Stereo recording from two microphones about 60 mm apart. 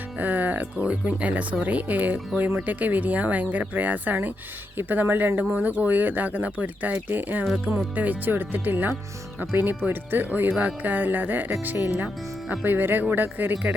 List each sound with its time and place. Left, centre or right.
0.2 s speech: right